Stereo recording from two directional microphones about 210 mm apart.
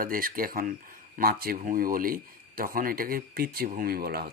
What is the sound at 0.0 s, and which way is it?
Speech, 40° right (ahead or behind).